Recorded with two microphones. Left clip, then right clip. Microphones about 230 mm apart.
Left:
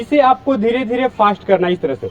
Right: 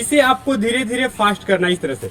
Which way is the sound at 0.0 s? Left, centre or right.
Right.